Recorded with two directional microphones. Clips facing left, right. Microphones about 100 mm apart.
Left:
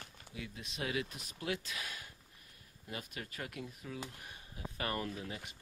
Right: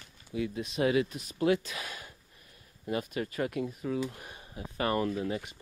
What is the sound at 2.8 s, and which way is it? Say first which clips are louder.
Speech: right 12 dB; 80° right.